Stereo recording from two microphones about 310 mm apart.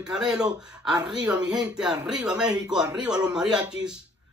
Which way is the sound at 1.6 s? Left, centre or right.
Centre.